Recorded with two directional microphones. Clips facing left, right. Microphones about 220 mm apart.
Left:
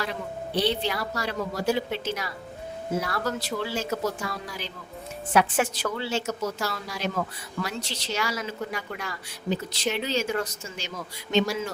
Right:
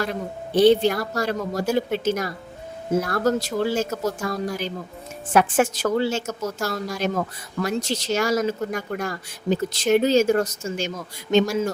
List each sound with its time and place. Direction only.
0.0 s speech: 50° right (ahead or behind)